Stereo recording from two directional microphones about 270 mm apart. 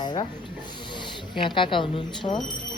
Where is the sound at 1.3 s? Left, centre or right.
Centre.